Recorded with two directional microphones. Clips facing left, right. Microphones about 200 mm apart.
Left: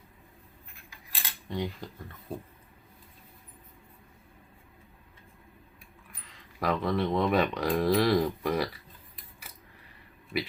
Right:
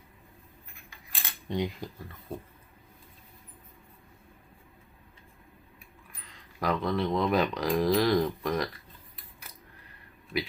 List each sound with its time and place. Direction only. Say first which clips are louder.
1.5 s cutlery: right 3 dB; 15° right (ahead or behind)
6.2 s speech: even; centre (ahead or behind)
10.3 s speech: even; 5° left (ahead or behind)